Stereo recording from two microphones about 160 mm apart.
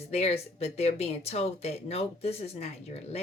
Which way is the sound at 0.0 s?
40° left (ahead or behind).